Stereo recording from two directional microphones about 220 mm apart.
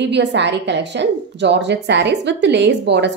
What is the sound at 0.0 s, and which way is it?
A woman's voice, 50° right (ahead or behind).